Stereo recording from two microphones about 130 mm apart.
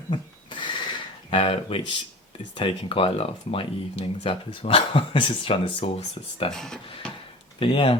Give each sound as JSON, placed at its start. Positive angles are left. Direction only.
{"t": 0.1, "sound": "a sound", "side_deg": 35}
{"t": 2.6, "sound": "speech", "side_deg": 45}
{"t": 6.5, "sound": "speech", "side_deg": 5}
{"t": 7.6, "sound": "speech", "side_deg": 45}